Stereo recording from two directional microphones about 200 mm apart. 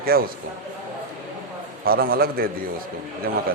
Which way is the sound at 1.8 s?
50° right (ahead or behind).